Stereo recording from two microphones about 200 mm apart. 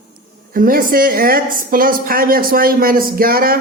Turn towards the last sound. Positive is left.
turn(degrees=-50)  # may be behind; listen again after turning